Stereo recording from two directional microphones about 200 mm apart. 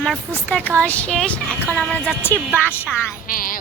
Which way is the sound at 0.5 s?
5° left (ahead or behind).